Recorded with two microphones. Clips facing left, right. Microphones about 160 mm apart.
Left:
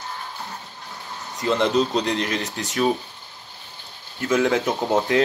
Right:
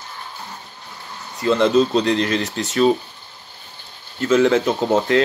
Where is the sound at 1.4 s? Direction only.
15° left (ahead or behind).